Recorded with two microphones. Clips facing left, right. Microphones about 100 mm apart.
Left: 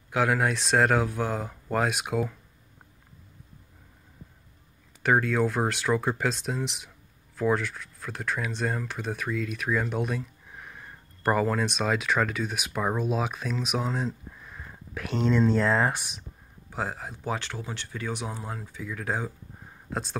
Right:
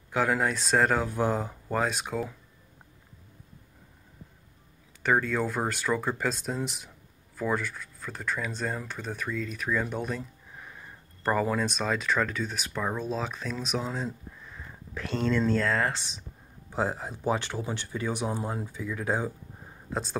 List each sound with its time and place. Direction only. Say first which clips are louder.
0.1 s speech: left 1 dB; 5° left (ahead or behind)
5.0 s speech: left 2 dB; centre (ahead or behind)
16.7 s speech: right 3 dB; centre (ahead or behind)
18.4 s speech: right 4 dB; 15° right (ahead or behind)
18.8 s speech: right 1 dB; centre (ahead or behind)